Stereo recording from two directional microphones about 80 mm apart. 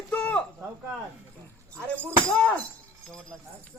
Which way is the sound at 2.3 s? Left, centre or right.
Centre.